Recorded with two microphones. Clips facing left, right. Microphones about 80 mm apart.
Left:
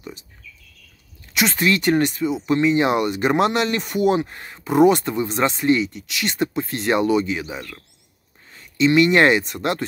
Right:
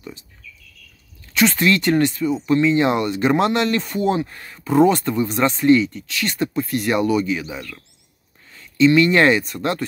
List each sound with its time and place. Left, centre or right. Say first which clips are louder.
1.3 s speech: right 3 dB; centre